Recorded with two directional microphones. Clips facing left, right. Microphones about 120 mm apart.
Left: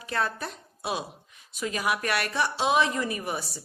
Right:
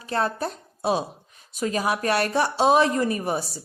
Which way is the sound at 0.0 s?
35° right (ahead or behind).